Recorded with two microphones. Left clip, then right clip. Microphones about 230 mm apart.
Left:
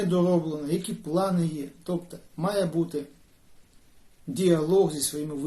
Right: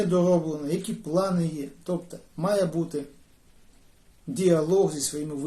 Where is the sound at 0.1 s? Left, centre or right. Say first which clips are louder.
Right 1 dB; centre.